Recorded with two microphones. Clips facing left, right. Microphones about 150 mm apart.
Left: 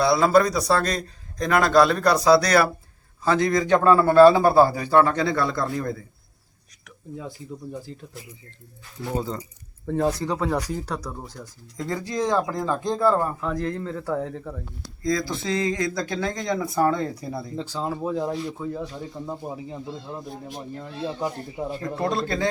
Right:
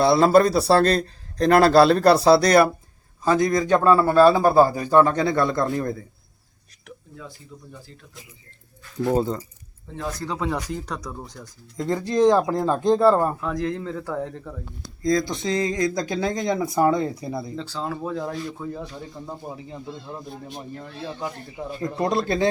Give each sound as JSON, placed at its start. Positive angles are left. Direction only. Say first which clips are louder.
{"t": 0.0, "sound": "a man's voice", "louder": "right 2 dB", "side_deg": -30}
{"t": 10.2, "sound": "speech", "louder": "left 2 dB", "side_deg": 5}
{"t": 11.9, "sound": "speech", "louder": "right 7 dB", "side_deg": -25}
{"t": 13.4, "sound": "speech", "louder": "right 1 dB", "side_deg": 0}
{"t": 15.4, "sound": "speech", "louder": "even", "side_deg": -25}
{"t": 17.0, "sound": "a man's voice", "louder": "right 2 dB", "side_deg": -10}
{"t": 17.6, "sound": "speech", "louder": "left 1 dB", "side_deg": 10}
{"t": 18.7, "sound": "speech", "louder": "left 2 dB", "side_deg": 5}
{"t": 21.0, "sound": "speech", "louder": "left 4 dB", "side_deg": 25}
{"t": 21.8, "sound": "speech", "louder": "right 4 dB", "side_deg": -20}